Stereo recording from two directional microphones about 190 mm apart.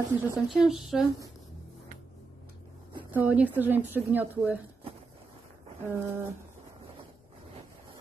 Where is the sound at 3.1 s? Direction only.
10° right (ahead or behind).